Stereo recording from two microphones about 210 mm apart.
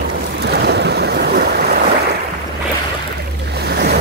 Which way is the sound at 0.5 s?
50° right (ahead or behind).